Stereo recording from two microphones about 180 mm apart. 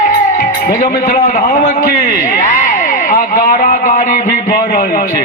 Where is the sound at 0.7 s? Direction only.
45° left (ahead or behind).